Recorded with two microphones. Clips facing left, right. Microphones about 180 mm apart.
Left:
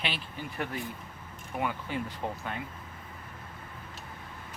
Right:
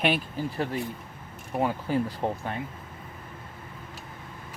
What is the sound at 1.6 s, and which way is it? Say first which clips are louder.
Speech: right 7 dB; 35° right (ahead or behind).